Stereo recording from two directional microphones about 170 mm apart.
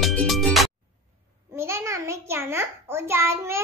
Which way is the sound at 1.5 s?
15° right (ahead or behind).